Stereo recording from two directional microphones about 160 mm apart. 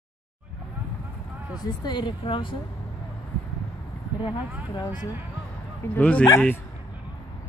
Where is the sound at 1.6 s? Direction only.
30° left (ahead or behind).